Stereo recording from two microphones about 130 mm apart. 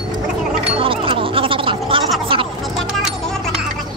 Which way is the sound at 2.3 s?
45° right (ahead or behind).